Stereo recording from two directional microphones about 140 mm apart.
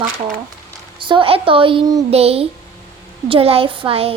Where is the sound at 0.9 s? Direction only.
35° right (ahead or behind).